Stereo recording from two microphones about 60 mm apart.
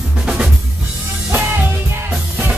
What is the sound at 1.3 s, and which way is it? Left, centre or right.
Music, right.